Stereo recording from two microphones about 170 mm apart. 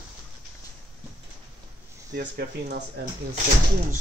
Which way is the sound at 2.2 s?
65° right (ahead or behind).